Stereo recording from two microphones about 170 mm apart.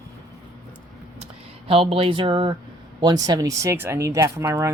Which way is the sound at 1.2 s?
35° right (ahead or behind).